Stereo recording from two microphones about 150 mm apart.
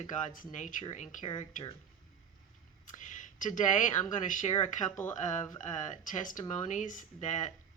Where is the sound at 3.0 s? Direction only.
55° left (ahead or behind).